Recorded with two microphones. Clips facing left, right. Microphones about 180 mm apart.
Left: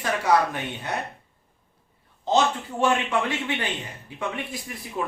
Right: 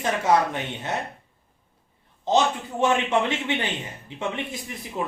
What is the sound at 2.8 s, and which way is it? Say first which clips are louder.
Speech: right 2 dB; 25° right (ahead or behind).